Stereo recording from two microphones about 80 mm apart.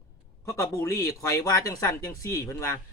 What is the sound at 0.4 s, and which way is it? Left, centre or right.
Speech, left.